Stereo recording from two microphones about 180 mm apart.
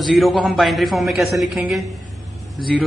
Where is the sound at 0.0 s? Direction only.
Centre (ahead or behind).